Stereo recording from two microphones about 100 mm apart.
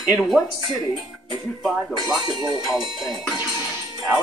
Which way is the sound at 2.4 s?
45° right (ahead or behind).